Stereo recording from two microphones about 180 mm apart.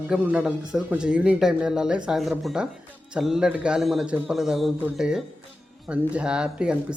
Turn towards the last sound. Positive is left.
turn(degrees=-5)  # may be behind; listen again after turning